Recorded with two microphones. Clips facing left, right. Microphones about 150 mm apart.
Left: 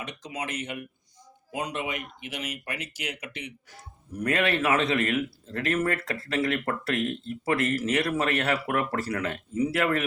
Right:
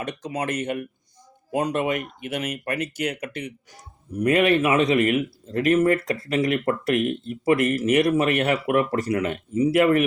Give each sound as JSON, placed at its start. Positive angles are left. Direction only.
{"t": 0.0, "sound": "speech", "side_deg": -55}
{"t": 4.2, "sound": "a man's voice", "side_deg": -20}